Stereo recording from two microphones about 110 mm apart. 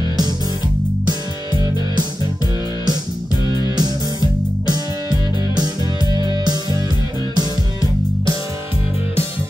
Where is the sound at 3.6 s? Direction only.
40° right (ahead or behind).